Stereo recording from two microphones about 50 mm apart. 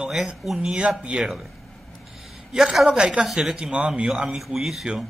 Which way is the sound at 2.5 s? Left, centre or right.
Centre.